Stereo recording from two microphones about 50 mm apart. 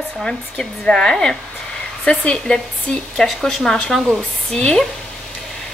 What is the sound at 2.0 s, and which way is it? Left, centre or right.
Speech, left.